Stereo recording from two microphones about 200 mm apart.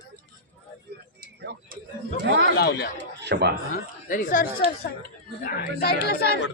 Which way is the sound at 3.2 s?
60° right (ahead or behind).